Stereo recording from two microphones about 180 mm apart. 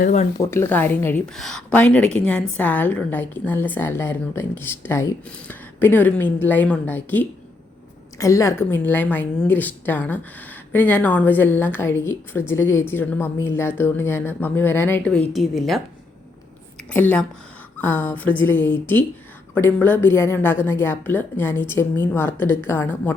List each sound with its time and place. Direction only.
0.0 s speech: 40° left (ahead or behind)
0.3 s a woman's voice: 15° left (ahead or behind)
16.9 s a woman's voice: 10° left (ahead or behind)